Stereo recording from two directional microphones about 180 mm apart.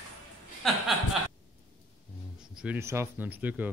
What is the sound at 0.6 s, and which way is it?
Speech, centre (ahead or behind).